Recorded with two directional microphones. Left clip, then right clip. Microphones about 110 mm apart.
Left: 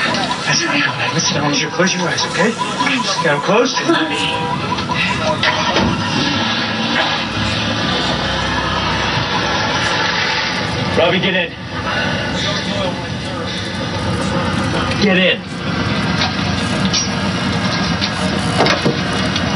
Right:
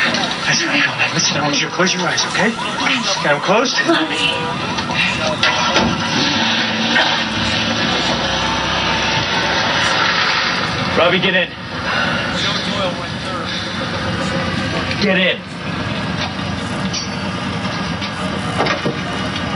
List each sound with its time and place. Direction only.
0.0 s speech: 20° right (ahead or behind)
4.9 s music: 20° right (ahead or behind)
9.3 s vehicle: 20° right (ahead or behind)
11.0 s speech: 20° right (ahead or behind)